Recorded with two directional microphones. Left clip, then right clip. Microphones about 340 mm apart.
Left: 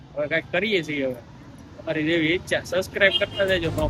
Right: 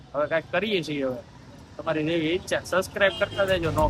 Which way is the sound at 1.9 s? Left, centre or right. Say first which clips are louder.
Left 3 dB; centre.